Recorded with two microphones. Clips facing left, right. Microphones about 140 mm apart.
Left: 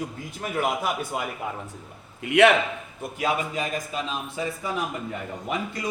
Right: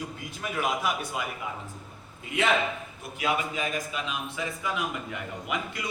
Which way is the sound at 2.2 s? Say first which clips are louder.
Left 9 dB; 70° left (ahead or behind).